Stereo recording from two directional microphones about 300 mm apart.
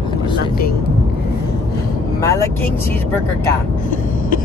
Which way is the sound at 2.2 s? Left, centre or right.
Centre.